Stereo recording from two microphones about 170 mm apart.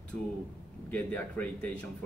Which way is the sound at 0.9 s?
10° left (ahead or behind).